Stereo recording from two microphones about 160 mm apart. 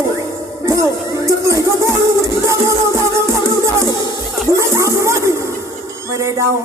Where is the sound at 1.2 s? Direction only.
20° right (ahead or behind).